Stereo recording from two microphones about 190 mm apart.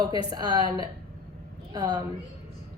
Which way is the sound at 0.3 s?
20° right (ahead or behind).